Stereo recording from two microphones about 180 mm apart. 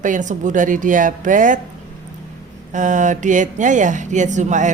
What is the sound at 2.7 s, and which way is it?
Speech, 45° right (ahead or behind).